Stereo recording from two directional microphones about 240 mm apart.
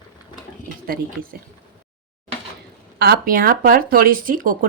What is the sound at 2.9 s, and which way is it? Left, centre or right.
Speech, right.